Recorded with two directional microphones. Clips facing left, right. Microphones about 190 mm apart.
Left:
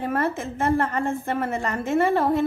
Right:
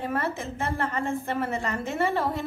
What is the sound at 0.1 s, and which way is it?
A woman's voice, 50° left (ahead or behind).